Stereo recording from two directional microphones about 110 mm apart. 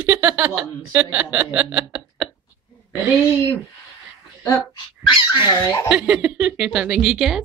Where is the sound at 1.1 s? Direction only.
15° right (ahead or behind).